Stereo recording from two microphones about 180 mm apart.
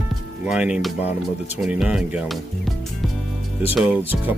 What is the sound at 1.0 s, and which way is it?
Speech, 35° left (ahead or behind).